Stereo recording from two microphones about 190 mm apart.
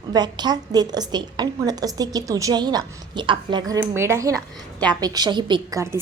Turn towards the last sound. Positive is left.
turn(degrees=-20)  # may be behind; listen again after turning